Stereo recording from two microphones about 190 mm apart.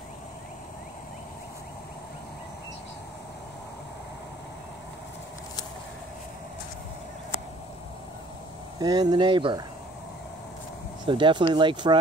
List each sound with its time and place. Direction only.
8.7 s speech: 20° right (ahead or behind)
11.1 s speech: 25° right (ahead or behind)